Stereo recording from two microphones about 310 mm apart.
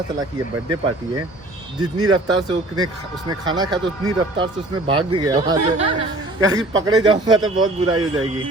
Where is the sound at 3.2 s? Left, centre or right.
Centre.